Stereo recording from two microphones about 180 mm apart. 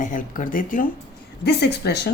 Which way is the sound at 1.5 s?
65° left (ahead or behind).